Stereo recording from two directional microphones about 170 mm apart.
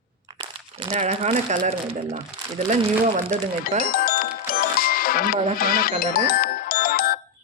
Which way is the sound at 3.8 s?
60° left (ahead or behind).